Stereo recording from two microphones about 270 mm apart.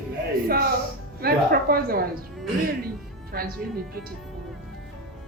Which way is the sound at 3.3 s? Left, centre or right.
Right.